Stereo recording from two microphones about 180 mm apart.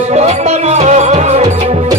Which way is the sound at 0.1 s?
40° right (ahead or behind).